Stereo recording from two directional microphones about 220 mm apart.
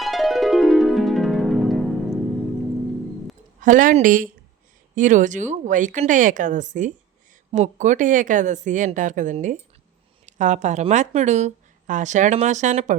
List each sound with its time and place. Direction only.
0.0 s music: centre (ahead or behind)
3.6 s speech: 35° right (ahead or behind)